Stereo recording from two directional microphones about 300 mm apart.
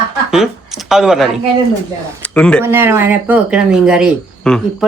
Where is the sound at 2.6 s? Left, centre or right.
Centre.